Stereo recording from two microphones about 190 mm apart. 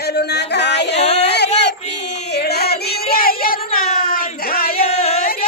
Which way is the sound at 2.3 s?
55° left (ahead or behind).